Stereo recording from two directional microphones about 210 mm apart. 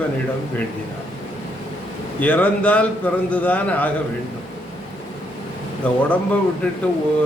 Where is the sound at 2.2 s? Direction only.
5° left (ahead or behind).